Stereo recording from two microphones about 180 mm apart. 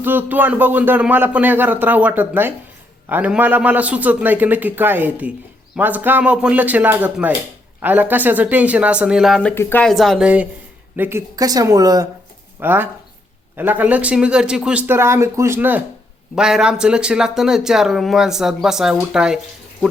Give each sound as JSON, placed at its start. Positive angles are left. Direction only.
{"t": 0.0, "sound": "a man's voice", "side_deg": -10}
{"t": 9.9, "sound": "a man's voice", "side_deg": 0}